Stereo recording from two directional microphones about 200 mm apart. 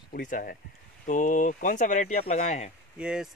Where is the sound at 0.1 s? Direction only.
45° left (ahead or behind).